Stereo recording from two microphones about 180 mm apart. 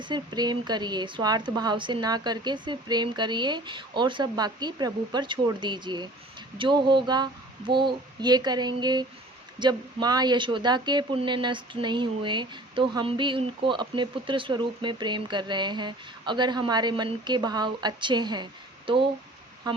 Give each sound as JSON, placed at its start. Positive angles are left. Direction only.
{"t": 0.0, "sound": "speech", "side_deg": -25}